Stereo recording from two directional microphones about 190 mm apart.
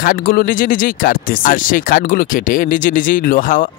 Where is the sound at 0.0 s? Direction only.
50° left (ahead or behind).